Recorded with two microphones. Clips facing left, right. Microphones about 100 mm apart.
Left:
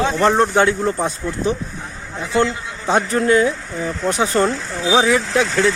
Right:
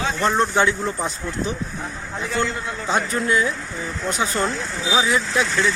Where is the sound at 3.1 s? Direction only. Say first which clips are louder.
Left 8 dB; 55° left (ahead or behind).